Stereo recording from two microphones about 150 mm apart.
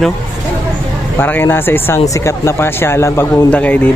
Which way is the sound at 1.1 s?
15° left (ahead or behind).